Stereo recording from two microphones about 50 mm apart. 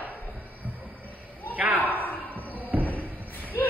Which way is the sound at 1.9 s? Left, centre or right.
Left.